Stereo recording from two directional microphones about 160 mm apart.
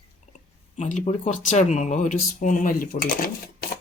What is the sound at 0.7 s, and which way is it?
Speech, 45° left (ahead or behind).